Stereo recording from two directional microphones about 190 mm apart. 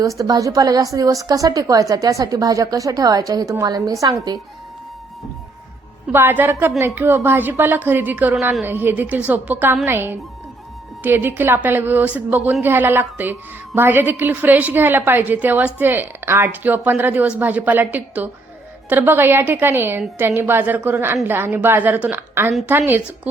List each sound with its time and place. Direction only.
0.0 s a woman's voice: 15° right (ahead or behind)
6.1 s a woman's voice: 10° right (ahead or behind)